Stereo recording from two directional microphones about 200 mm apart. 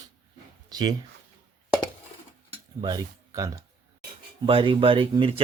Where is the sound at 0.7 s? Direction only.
20° right (ahead or behind).